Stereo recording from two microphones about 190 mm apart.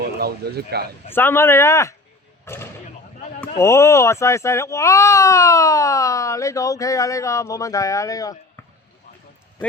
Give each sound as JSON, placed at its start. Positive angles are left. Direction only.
{"t": 0.0, "sound": "speech", "side_deg": -55}
{"t": 1.1, "sound": "speech", "side_deg": 10}
{"t": 2.4, "sound": "a sound", "side_deg": 15}
{"t": 3.6, "sound": "speech", "side_deg": 15}